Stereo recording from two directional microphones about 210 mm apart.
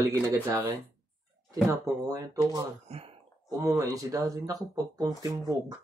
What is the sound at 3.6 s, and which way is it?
Speech, 15° right (ahead or behind).